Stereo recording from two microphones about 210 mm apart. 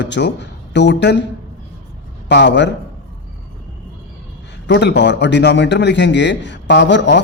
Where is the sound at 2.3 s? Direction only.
55° left (ahead or behind).